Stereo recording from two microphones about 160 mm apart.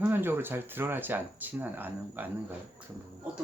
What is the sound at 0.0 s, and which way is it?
Speech, 15° right (ahead or behind).